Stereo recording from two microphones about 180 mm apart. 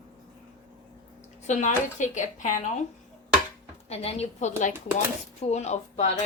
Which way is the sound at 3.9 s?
35° left (ahead or behind).